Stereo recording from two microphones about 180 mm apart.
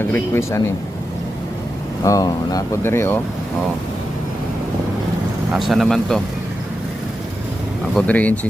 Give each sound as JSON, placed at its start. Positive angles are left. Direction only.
{"t": 0.0, "sound": "speech", "side_deg": 15}
{"t": 2.0, "sound": "speech", "side_deg": 20}
{"t": 5.5, "sound": "speech", "side_deg": 0}
{"t": 7.9, "sound": "speech", "side_deg": 10}